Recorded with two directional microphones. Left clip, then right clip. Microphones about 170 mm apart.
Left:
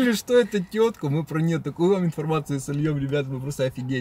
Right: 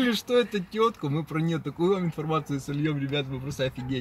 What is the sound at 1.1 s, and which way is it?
Speech, 20° left (ahead or behind).